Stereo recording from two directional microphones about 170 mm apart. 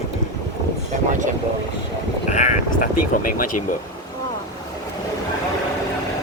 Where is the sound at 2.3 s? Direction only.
45° left (ahead or behind).